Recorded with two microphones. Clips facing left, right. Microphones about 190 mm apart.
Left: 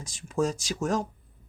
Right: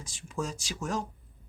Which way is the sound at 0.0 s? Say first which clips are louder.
Left 8 dB; 40° left (ahead or behind).